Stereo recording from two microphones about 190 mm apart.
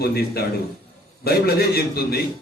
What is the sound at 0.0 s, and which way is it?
A man's voice, 55° left (ahead or behind).